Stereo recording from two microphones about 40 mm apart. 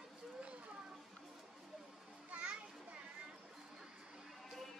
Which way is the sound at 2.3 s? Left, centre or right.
Right.